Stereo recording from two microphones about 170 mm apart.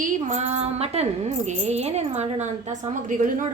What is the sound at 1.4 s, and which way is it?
A woman's voice, 40° right (ahead or behind).